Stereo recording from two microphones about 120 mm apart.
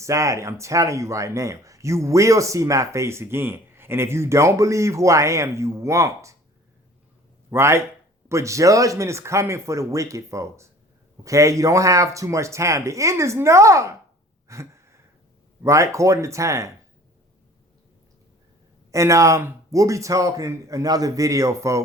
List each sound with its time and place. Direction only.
0.0 s speech: 25° right (ahead or behind)
7.5 s speech: 20° right (ahead or behind)
14.4 s gasp: 25° right (ahead or behind)
15.6 s speech: 25° right (ahead or behind)
18.9 s speech: 25° right (ahead or behind)